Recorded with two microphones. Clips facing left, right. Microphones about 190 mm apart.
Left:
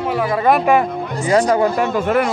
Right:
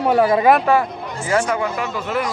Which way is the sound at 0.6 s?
15° left (ahead or behind).